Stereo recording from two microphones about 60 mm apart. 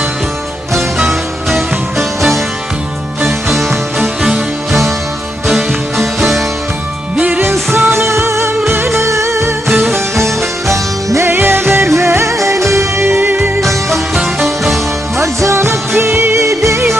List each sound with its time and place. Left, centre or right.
0.7 s music: centre
7.2 s music: right
7.5 s music: right
9.6 s music: centre
9.9 s music: right
11.3 s music: right
13.6 s music: centre
15.2 s music: right